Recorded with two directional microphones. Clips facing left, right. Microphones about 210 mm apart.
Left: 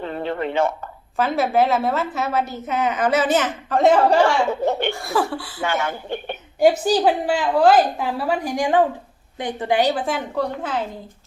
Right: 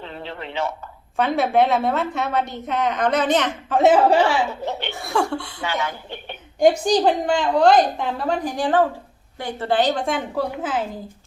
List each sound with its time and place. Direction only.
0.0 s a sound: 50° left (ahead or behind)
1.1 s a woman's voice: centre (ahead or behind)
4.6 s speech: 50° left (ahead or behind)
4.9 s a woman's voice: centre (ahead or behind)
5.6 s speech: 50° left (ahead or behind)
6.6 s a woman's voice: 5° left (ahead or behind)